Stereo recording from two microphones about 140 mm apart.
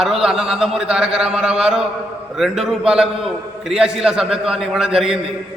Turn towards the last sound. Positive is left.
turn(degrees=-5)  # may be behind; listen again after turning